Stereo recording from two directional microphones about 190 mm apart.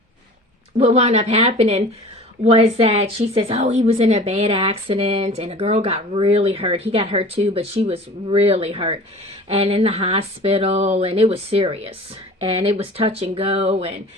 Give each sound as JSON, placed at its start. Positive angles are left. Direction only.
{"t": 0.8, "sound": "a woman's voice", "side_deg": -30}